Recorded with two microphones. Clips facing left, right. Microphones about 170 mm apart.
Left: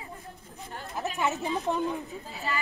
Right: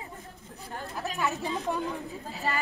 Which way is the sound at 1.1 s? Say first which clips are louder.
Left 2 dB; 20° left (ahead or behind).